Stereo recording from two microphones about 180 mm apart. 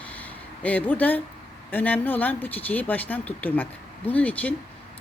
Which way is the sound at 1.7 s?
10° left (ahead or behind).